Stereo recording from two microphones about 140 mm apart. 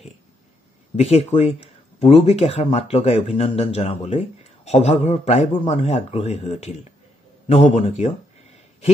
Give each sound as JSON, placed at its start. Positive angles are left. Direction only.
{"t": 0.9, "sound": "speech", "side_deg": 50}